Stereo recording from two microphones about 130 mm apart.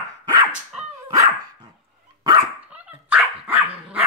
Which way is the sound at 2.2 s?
30° right (ahead or behind).